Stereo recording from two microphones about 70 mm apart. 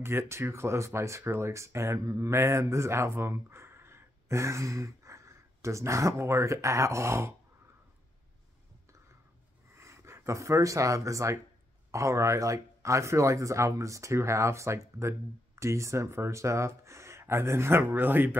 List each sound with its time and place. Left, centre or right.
0.0 s speech: right
9.8 s speech: right